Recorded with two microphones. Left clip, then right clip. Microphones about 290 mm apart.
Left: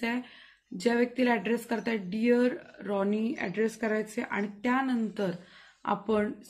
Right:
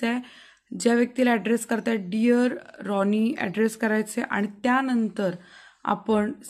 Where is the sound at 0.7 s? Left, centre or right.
Right.